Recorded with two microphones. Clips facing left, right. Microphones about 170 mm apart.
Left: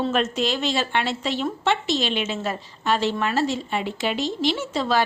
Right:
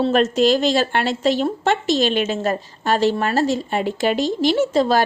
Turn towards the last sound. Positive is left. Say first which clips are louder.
# right 6 dB
turn(degrees=-45)  # may be behind; listen again after turning